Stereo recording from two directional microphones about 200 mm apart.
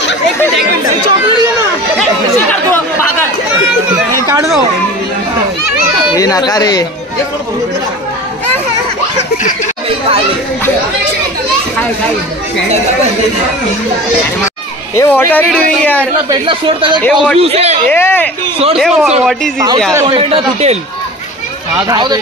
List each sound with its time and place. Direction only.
2.5 s chatter: 10° left (ahead or behind)
6.1 s a man's voice: 15° left (ahead or behind)
9.8 s children playing: 30° right (ahead or behind)
15.0 s a man's voice: 10° left (ahead or behind)
16.3 s speech: 25° right (ahead or behind)
17.0 s a man's voice: centre (ahead or behind)
17.4 s a man's voice: 30° right (ahead or behind)
17.8 s a man's voice: 10° left (ahead or behind)
18.8 s a man's voice: centre (ahead or behind)
19.9 s speech: 15° right (ahead or behind)
20.2 s speech: 30° right (ahead or behind)
21.8 s speech: 20° right (ahead or behind)